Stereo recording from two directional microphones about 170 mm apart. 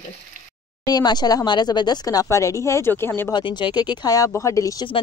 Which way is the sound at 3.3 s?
25° left (ahead or behind).